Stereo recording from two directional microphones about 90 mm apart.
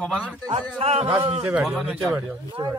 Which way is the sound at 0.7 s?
90° right.